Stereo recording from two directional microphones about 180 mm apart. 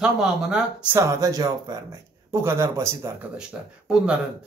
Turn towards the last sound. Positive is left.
turn(degrees=-5)  # may be behind; listen again after turning